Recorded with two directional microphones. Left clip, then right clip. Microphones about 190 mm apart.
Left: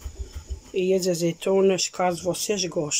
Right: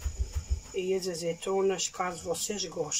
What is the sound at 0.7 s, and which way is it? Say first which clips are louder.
Speech: left 8 dB; 55° left (ahead or behind).